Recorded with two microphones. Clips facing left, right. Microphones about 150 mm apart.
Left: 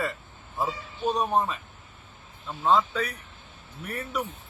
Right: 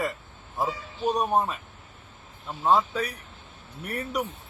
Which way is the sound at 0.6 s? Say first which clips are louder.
Right 1 dB; 10° right (ahead or behind).